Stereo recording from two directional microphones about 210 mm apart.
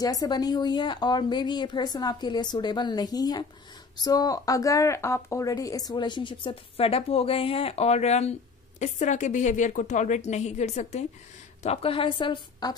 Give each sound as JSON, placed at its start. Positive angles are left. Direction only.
{"t": 0.0, "sound": "a woman's voice", "side_deg": 20}